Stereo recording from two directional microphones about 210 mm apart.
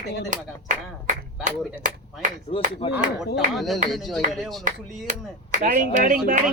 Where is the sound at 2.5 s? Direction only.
30° left (ahead or behind).